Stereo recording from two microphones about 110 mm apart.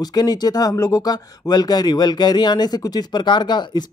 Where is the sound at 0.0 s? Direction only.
40° left (ahead or behind).